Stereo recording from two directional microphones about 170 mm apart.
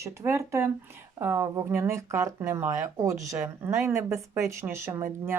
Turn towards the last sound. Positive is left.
turn(degrees=-15)  # may be behind; listen again after turning